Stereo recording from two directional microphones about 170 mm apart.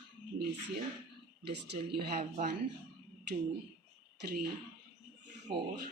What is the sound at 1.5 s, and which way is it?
Speech, 75° right (ahead or behind).